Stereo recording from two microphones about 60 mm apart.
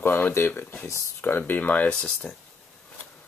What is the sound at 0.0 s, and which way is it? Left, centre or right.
Speech, left.